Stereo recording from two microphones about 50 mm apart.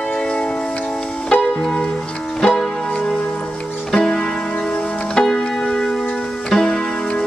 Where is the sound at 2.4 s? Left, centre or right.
Centre.